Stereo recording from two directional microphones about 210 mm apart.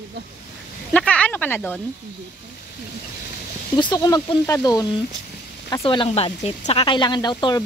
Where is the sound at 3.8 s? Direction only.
20° left (ahead or behind).